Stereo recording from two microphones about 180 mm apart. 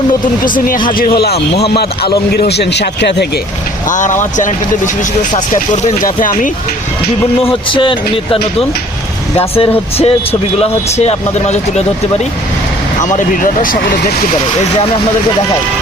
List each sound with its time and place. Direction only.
0.4 s speech: 50° left (ahead or behind); by 3.2 s 70° left (ahead or behind)
3.8 s speech: 45° left (ahead or behind)
5.5 s speech: 45° left (ahead or behind)
7.5 s speech: 30° left (ahead or behind)
13.0 s speech: 45° left (ahead or behind)